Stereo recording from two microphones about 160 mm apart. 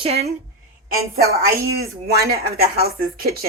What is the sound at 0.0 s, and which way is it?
Speech, 40° right (ahead or behind).